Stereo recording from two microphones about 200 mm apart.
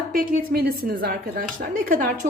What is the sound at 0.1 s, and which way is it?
A woman's voice, 45° right (ahead or behind).